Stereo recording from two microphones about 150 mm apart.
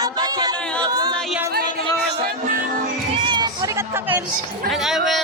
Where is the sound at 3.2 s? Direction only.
30° right (ahead or behind).